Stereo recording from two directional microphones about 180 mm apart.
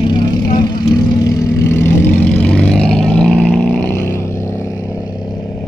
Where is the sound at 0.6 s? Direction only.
20° left (ahead or behind).